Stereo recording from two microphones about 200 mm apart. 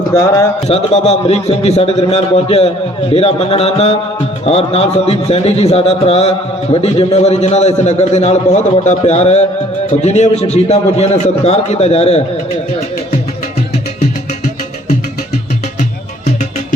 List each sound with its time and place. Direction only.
0.1 s speech: 15° left (ahead or behind)
0.7 s a man's voice: 30° left (ahead or behind)
14.0 s music: 40° left (ahead or behind)